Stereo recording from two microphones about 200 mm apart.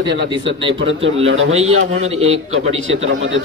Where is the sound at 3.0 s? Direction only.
80° right.